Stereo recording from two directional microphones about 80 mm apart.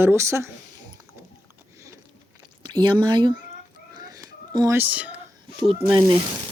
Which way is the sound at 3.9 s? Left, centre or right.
Right.